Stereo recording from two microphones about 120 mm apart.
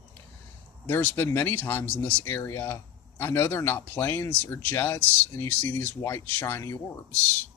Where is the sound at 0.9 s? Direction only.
20° left (ahead or behind).